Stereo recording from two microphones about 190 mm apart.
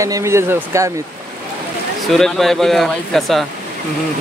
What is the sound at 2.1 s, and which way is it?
Speech, centre (ahead or behind).